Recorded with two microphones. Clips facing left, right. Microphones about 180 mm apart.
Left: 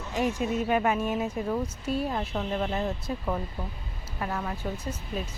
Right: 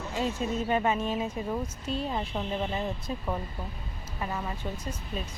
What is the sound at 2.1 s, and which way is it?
Speech, 5° right (ahead or behind).